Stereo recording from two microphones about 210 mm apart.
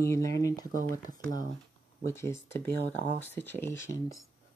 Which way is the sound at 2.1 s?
15° left (ahead or behind).